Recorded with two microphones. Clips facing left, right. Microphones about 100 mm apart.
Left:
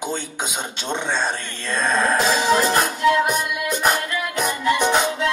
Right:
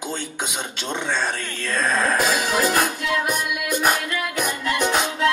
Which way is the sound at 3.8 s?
5° right (ahead or behind).